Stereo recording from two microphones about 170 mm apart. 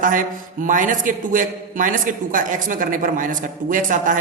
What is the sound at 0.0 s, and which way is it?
A man's voice, 50° right (ahead or behind).